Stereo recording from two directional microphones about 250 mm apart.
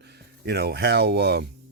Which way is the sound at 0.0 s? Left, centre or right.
Right.